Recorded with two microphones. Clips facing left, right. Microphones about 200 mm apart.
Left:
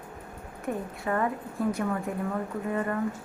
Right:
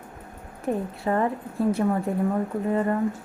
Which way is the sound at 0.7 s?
30° right (ahead or behind).